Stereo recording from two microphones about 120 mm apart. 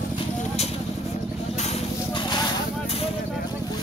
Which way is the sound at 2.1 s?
40° left (ahead or behind).